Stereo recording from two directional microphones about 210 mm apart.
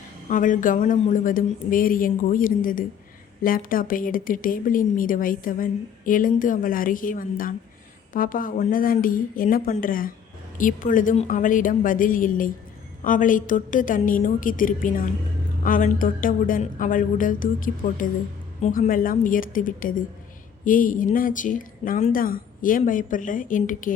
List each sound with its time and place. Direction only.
0.3 s a woman's voice: 40° left (ahead or behind)